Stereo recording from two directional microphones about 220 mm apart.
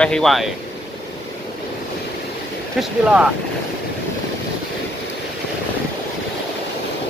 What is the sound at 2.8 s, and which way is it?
Speech, 5° right (ahead or behind).